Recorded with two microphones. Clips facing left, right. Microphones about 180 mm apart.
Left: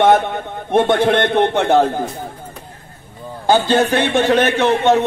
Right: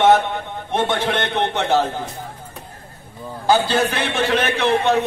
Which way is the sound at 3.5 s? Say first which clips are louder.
Left 4 dB; 45° left (ahead or behind).